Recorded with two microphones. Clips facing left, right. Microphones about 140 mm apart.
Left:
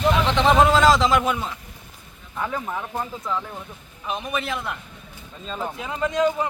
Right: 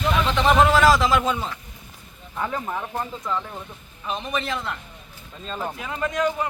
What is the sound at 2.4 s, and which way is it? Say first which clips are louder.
A man's voice: even; centre (ahead or behind).